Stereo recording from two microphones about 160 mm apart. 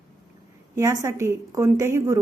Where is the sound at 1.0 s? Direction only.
20° right (ahead or behind).